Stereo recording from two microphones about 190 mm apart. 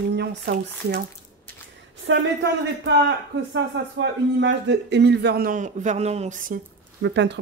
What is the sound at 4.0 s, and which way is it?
A man's voice, 70° right (ahead or behind).